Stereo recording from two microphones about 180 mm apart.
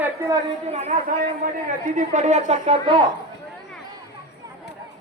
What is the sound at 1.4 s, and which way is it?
A man's voice, 50° right (ahead or behind).